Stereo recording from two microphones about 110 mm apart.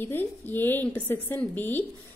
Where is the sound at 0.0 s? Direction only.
20° left (ahead or behind).